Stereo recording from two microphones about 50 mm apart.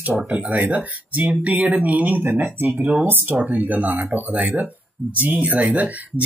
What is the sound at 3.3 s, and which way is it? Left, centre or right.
Speech, right.